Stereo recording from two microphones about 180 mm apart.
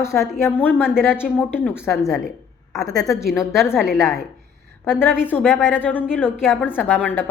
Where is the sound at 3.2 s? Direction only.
Centre (ahead or behind).